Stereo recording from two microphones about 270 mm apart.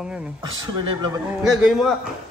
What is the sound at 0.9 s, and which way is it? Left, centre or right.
Speech, centre.